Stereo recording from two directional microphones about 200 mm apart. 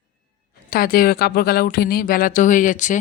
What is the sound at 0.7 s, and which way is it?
Speech, 45° left (ahead or behind).